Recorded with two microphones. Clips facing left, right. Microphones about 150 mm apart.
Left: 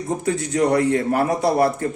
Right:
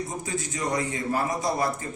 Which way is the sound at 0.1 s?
65° left (ahead or behind).